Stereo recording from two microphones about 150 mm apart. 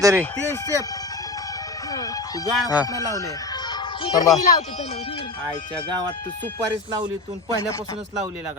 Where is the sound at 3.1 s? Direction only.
25° left (ahead or behind).